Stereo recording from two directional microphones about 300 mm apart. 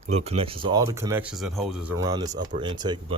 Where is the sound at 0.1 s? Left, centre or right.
Right.